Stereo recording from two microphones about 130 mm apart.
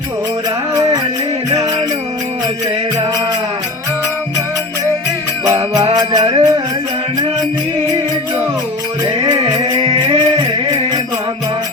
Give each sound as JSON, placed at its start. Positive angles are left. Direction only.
{"t": 6.0, "sound": "music", "side_deg": -35}
{"t": 9.2, "sound": "music", "side_deg": -35}